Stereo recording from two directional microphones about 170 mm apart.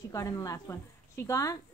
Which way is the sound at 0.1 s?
20° left (ahead or behind).